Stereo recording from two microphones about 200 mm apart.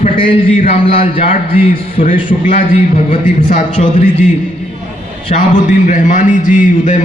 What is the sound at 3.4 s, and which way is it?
Speech, 40° left (ahead or behind).